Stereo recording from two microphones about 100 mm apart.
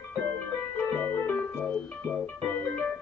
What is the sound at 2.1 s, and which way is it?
Music, 15° left (ahead or behind).